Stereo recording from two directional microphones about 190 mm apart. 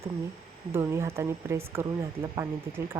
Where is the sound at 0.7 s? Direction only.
15° right (ahead or behind).